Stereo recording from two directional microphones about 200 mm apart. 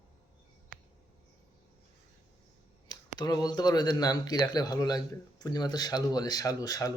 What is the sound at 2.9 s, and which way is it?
Speech, 20° left (ahead or behind).